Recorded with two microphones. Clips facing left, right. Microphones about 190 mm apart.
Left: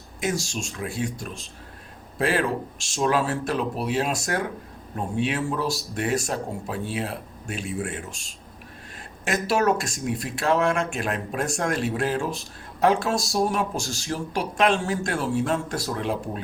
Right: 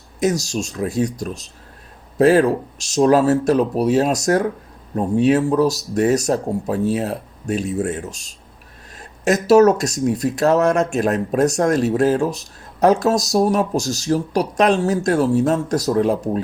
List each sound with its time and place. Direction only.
0.2 s speech: 40° right (ahead or behind)